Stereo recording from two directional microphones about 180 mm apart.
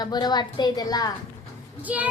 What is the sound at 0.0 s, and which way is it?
A woman's voice, 25° left (ahead or behind).